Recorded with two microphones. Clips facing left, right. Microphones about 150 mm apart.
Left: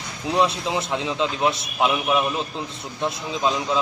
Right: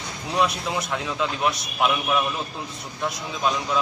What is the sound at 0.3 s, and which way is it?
A man's voice, 25° left (ahead or behind).